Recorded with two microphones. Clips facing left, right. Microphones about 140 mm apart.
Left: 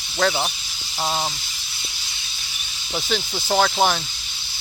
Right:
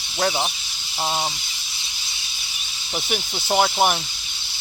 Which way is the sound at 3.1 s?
15° right (ahead or behind).